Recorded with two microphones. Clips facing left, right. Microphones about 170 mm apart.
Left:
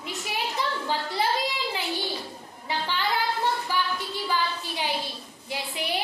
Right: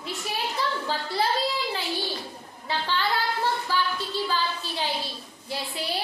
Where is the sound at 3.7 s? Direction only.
15° left (ahead or behind).